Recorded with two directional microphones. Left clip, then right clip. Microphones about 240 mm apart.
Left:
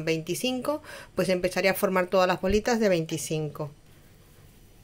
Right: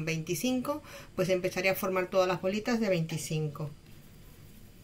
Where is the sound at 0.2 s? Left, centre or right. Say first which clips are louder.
Left 3 dB; left.